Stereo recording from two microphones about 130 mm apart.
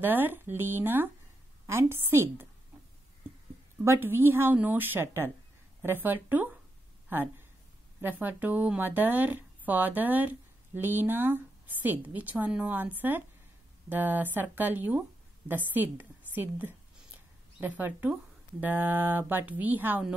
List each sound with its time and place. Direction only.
0.0 s a woman's voice: 15° right (ahead or behind)
3.8 s speech: 20° right (ahead or behind)